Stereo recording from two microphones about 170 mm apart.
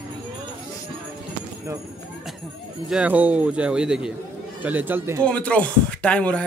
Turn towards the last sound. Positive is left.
turn(degrees=5)  # may be behind; listen again after turning